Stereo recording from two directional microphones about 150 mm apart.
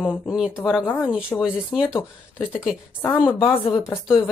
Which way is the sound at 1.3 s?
10° left (ahead or behind).